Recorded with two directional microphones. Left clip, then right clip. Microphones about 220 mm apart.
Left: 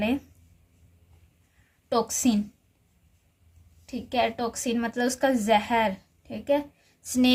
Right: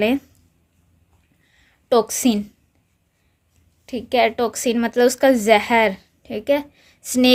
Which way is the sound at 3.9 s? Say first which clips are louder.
Right 8 dB; 35° right (ahead or behind).